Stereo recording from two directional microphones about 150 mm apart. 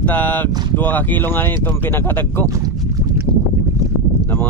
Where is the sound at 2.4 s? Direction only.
25° right (ahead or behind).